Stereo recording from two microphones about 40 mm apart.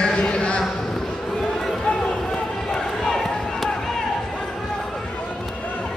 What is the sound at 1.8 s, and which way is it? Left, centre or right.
Run, centre.